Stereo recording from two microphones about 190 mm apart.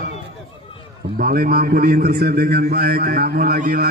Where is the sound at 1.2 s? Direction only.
50° right (ahead or behind).